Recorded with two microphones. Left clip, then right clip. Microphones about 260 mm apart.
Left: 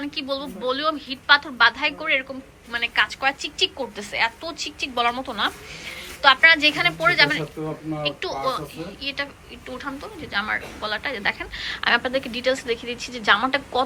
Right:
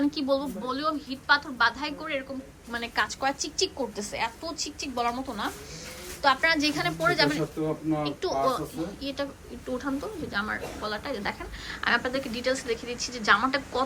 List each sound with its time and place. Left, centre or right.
0.0 s a woman's voice: centre
9.7 s a woman's voice: centre